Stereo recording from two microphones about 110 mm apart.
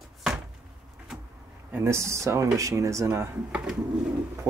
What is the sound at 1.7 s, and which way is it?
Speech, 25° right (ahead or behind).